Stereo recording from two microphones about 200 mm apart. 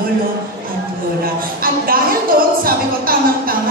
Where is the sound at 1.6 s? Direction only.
45° right (ahead or behind).